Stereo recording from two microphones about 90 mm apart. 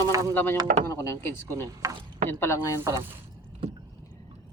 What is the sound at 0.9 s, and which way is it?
Speech, 30° left (ahead or behind).